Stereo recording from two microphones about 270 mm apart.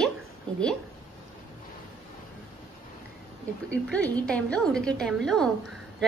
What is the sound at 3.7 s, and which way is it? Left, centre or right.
A woman's voice, centre.